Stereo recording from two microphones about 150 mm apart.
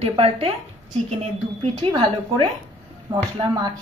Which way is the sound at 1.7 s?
35° right (ahead or behind).